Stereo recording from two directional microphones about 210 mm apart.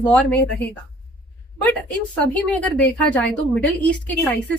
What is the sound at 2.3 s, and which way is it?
A woman's voice, 5° left (ahead or behind).